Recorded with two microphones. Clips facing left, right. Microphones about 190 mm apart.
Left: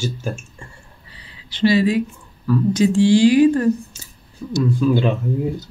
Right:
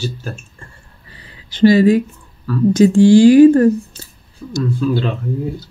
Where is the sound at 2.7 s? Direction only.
45° right (ahead or behind).